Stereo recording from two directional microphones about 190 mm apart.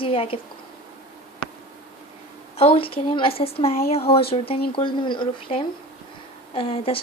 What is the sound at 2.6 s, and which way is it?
Speech, 30° left (ahead or behind).